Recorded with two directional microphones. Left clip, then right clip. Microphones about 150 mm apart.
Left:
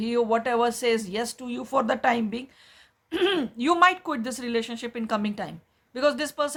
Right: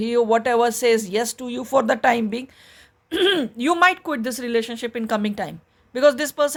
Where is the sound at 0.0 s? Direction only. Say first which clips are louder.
Right 5 dB; 50° right (ahead or behind).